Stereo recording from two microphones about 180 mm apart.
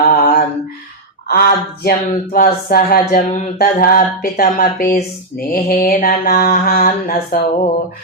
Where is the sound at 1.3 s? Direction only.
60° left (ahead or behind).